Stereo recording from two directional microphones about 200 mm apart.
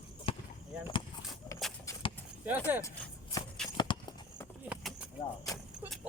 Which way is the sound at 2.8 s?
15° left (ahead or behind).